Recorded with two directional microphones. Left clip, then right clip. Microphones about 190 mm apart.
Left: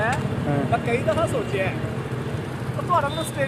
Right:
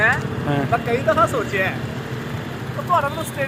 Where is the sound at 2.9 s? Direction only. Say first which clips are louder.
Right 2 dB; 20° right (ahead or behind).